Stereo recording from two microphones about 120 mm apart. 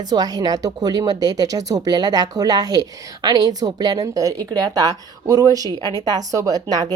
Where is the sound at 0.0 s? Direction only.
35° right (ahead or behind).